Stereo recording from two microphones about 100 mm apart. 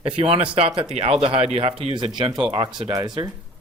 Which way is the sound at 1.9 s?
50° right (ahead or behind).